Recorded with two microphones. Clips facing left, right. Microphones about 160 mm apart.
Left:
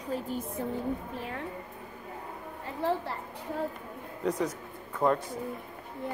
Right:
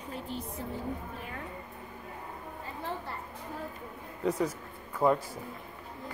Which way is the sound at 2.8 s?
90° left.